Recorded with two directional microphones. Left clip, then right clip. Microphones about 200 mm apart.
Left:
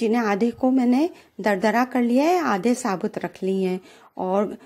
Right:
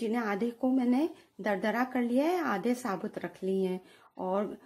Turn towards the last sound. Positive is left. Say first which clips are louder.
# left 9 dB
turn(degrees=30)  # may be behind; listen again after turning